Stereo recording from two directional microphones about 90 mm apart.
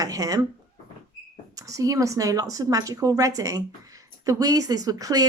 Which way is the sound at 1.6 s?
40° right (ahead or behind).